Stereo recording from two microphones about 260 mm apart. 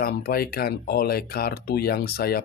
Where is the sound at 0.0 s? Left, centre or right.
Left.